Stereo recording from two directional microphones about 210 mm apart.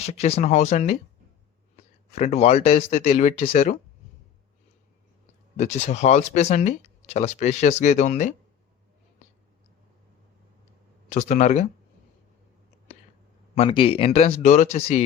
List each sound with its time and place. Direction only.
0.0 s speech: 30° left (ahead or behind)
2.1 s speech: 30° left (ahead or behind)
5.5 s speech: 35° left (ahead or behind)
11.1 s speech: 35° left (ahead or behind)
13.6 s speech: 25° left (ahead or behind)